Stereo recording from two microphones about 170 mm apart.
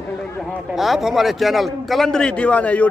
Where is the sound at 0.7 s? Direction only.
Centre (ahead or behind).